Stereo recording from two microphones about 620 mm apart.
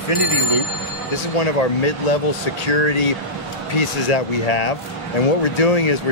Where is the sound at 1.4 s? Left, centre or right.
Left.